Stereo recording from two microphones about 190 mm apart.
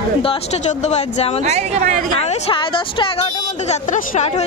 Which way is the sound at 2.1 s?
30° left (ahead or behind).